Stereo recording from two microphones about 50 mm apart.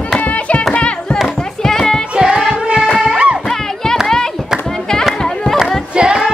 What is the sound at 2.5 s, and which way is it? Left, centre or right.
Music, centre.